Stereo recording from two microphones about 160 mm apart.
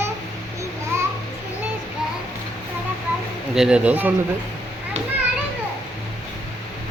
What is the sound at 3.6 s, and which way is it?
Speech, 5° right (ahead or behind).